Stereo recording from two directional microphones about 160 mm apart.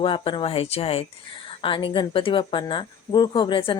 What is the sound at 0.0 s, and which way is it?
A woman's voice, 30° left (ahead or behind).